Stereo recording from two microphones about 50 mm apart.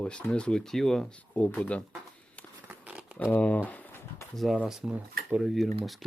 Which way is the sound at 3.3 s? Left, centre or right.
Left.